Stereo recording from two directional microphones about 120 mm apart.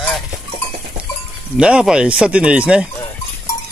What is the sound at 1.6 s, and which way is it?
Speech, 5° right (ahead or behind).